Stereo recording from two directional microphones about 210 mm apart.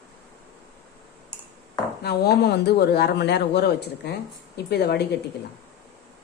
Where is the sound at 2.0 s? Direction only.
50° left (ahead or behind).